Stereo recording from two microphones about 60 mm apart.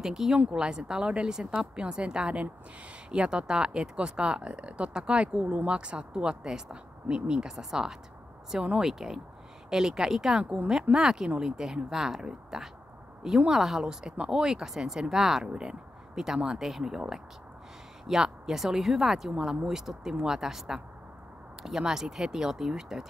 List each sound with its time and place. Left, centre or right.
0.0 s speech: centre